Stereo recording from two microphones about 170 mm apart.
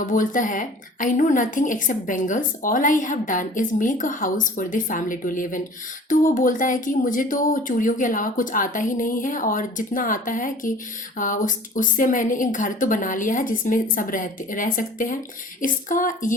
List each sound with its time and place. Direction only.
0.0 s a woman's voice: 50° left (ahead or behind)